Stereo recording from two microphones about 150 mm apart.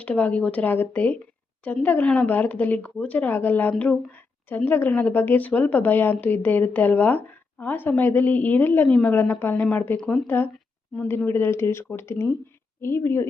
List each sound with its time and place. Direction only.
0.0 s a woman's voice: 10° left (ahead or behind)